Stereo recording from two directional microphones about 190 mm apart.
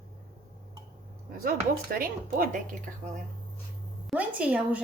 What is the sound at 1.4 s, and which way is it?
Speech, 50° right (ahead or behind).